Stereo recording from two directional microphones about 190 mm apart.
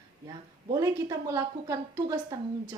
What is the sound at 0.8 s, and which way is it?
A woman's voice, 15° right (ahead or behind).